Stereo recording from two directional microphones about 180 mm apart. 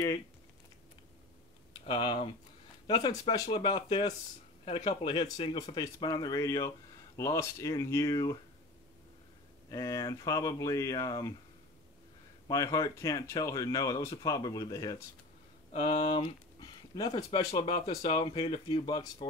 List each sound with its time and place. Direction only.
1.9 s speech: 30° left (ahead or behind)
3.7 s speech: 35° left (ahead or behind)
9.7 s speech: 20° left (ahead or behind)
12.4 s speech: 15° left (ahead or behind)
15.7 s speech: 35° left (ahead or behind)